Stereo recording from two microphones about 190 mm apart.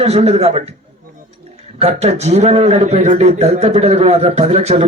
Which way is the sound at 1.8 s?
35° right (ahead or behind).